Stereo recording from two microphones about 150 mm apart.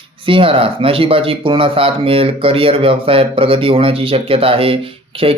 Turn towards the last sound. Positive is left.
turn(degrees=-40)  # may be behind; listen again after turning